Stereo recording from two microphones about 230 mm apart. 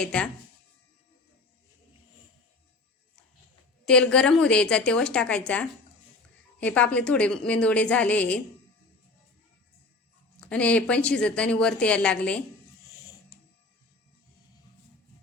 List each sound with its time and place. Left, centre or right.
0.0 s a woman's voice: centre
3.8 s a woman's voice: centre
10.3 s a woman's voice: centre